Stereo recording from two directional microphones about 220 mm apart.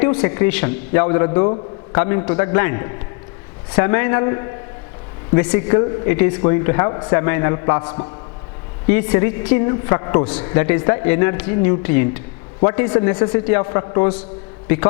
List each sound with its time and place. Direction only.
0.0 s a man's voice: 10° left (ahead or behind)
8.9 s a man's voice: 10° left (ahead or behind)